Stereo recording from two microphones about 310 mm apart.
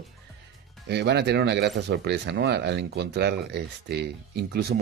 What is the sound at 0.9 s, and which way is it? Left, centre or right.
Speech, right.